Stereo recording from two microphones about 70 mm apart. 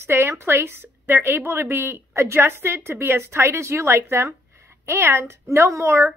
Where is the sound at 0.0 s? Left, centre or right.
Right.